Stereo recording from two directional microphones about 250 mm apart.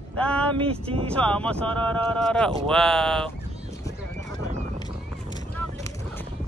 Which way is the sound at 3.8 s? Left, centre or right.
Centre.